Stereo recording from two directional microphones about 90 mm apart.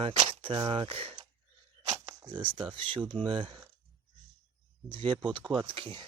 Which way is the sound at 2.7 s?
70° right (ahead or behind).